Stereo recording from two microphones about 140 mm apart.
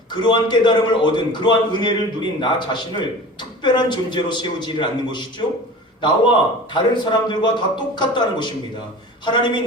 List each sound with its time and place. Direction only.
0.1 s a man's voice: 35° left (ahead or behind)